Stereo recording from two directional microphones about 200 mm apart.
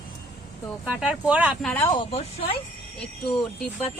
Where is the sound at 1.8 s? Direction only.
25° left (ahead or behind).